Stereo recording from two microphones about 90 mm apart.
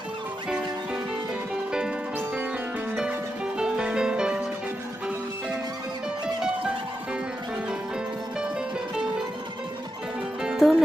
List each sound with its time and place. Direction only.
2.1 s music: 20° right (ahead or behind)
2.9 s music: 10° right (ahead or behind)
10.4 s music: 5° right (ahead or behind)